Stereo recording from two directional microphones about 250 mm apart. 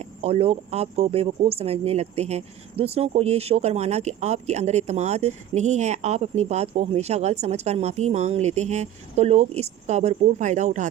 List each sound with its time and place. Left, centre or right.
0.0 s speech: right